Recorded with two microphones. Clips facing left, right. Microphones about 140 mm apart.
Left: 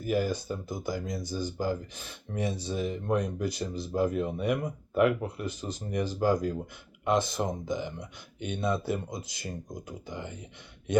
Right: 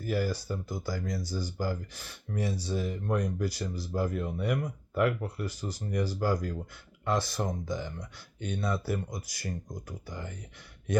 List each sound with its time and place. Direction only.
0.0 s speech: 20° left (ahead or behind)